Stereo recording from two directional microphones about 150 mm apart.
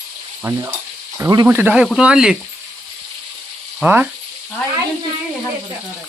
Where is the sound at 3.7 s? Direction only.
10° right (ahead or behind).